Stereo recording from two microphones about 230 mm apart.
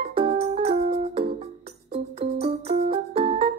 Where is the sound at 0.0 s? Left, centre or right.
Right.